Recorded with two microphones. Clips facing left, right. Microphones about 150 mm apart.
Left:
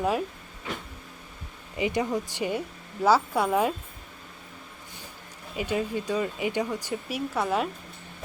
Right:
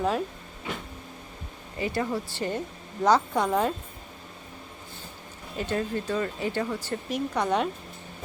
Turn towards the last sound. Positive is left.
turn(degrees=5)  # may be behind; listen again after turning